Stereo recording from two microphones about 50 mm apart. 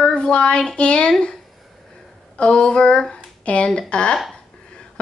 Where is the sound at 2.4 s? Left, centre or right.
Centre.